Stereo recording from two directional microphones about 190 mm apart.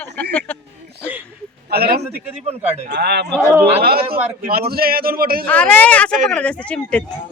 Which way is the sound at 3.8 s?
55° right (ahead or behind).